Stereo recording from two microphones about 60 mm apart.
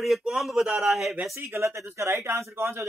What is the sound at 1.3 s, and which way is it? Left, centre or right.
Speech, right.